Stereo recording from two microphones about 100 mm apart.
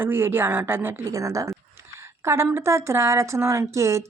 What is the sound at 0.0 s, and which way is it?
Speech, 25° right (ahead or behind).